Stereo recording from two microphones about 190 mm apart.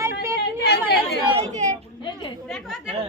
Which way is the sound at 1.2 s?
35° right (ahead or behind).